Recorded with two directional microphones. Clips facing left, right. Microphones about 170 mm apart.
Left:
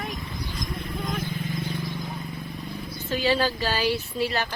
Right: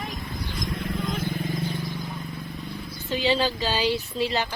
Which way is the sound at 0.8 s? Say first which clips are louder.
Right 3 dB; 90° right.